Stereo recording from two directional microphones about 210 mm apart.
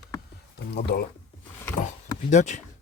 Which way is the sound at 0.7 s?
50° left (ahead or behind).